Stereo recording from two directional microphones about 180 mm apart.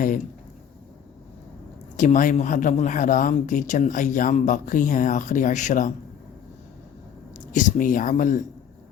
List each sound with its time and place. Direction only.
2.0 s speech: 45° left (ahead or behind)
7.3 s speech: 45° left (ahead or behind)